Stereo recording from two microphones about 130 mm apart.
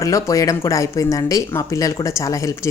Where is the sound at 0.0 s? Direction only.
25° left (ahead or behind).